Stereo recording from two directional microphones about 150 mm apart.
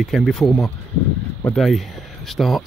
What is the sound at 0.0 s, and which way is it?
Speech, centre (ahead or behind).